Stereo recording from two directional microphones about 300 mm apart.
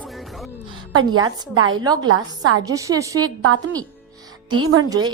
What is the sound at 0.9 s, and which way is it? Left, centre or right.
Speech, right.